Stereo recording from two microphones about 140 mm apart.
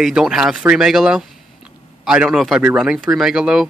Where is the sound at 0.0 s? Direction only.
5° right (ahead or behind).